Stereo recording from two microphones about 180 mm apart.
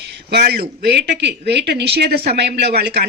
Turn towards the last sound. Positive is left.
turn(degrees=-65)  # may be behind; listen again after turning